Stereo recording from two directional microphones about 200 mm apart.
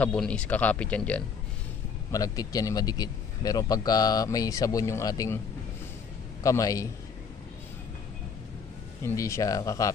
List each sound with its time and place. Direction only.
0.0 s speech: 5° left (ahead or behind)
2.1 s speech: 15° left (ahead or behind)
6.4 s speech: 15° left (ahead or behind)
9.0 s speech: 15° left (ahead or behind)